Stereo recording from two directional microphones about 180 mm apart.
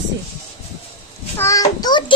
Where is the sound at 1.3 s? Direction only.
15° left (ahead or behind).